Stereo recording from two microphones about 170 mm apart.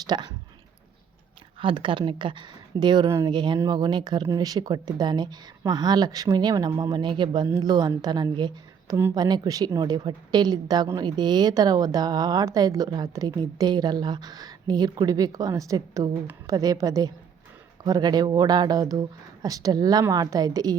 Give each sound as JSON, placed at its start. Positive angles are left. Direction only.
{"t": 0.1, "sound": "a woman's voice", "side_deg": -30}
{"t": 1.5, "sound": "a woman's voice", "side_deg": -30}